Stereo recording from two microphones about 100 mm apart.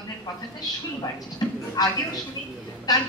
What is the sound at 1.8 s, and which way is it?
Music, 40° left (ahead or behind).